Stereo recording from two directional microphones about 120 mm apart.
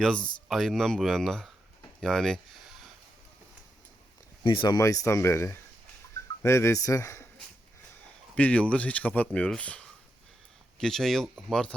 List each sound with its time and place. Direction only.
0.0 s speech: 5° left (ahead or behind)
4.4 s speech: 40° left (ahead or behind)
4.8 s speech: 25° left (ahead or behind)
8.4 s speech: 10° left (ahead or behind)